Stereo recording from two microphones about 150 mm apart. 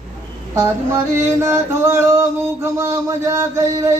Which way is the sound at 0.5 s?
20° right (ahead or behind).